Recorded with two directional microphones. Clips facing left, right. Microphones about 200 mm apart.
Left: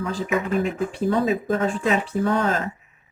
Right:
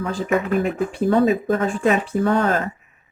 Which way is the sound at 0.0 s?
55° right (ahead or behind).